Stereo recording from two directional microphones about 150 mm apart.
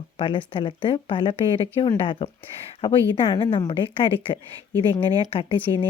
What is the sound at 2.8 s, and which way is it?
Speech, 35° left (ahead or behind).